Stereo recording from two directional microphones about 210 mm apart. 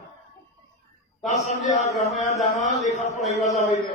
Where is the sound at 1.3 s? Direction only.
35° left (ahead or behind).